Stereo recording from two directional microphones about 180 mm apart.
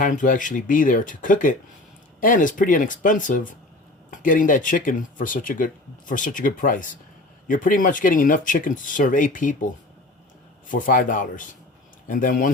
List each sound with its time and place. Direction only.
0.0 s speech: 45° left (ahead or behind)
10.7 s speech: 45° left (ahead or behind)